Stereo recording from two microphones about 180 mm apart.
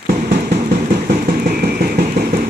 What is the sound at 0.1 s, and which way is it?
Vehicle, 55° right (ahead or behind).